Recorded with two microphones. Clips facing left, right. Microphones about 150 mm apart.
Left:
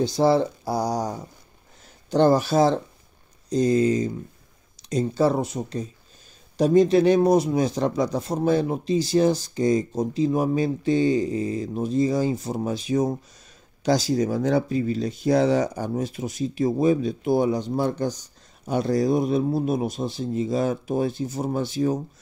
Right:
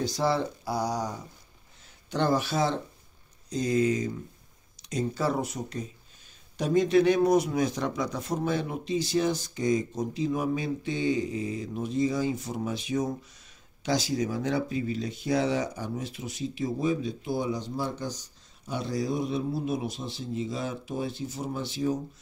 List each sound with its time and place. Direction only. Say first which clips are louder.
0.0 s speech: left 7 dB; 30° left (ahead or behind); by 21.9 s 45° left (ahead or behind)